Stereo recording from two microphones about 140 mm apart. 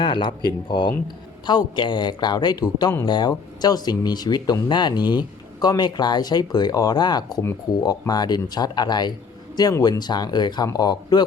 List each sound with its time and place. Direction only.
0.0 s a man's voice: 35° left (ahead or behind)